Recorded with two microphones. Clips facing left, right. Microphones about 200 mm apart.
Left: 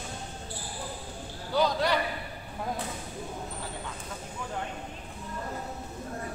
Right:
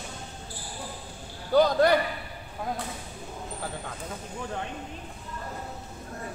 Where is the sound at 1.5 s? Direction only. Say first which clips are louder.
Right 6 dB; 50° right (ahead or behind).